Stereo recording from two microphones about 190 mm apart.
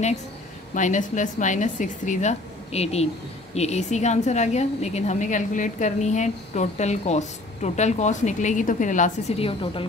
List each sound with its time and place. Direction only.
0.7 s a woman's voice: 40° left (ahead or behind)
9.5 s a woman's voice: 25° left (ahead or behind)